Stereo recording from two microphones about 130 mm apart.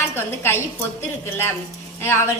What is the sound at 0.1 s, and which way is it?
Speech, 20° left (ahead or behind).